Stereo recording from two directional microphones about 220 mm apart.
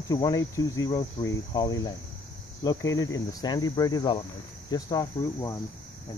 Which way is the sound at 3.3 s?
15° left (ahead or behind).